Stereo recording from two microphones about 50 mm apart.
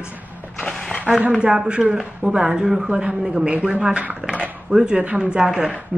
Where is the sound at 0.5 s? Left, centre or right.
Centre.